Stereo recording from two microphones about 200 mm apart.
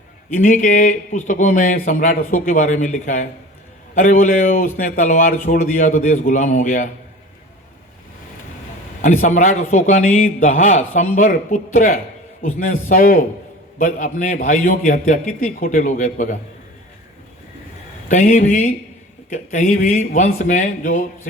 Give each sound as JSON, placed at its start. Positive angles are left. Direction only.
{"t": 0.3, "sound": "a man's voice", "side_deg": 40}
{"t": 9.0, "sound": "a man's voice", "side_deg": 40}
{"t": 18.1, "sound": "a man's voice", "side_deg": 40}